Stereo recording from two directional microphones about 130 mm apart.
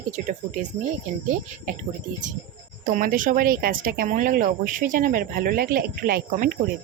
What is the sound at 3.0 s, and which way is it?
Speech, 90° right.